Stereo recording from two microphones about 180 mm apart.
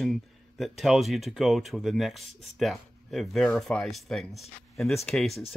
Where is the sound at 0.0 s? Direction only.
Centre (ahead or behind).